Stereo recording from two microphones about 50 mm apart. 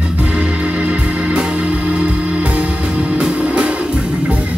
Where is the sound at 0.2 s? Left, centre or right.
Right.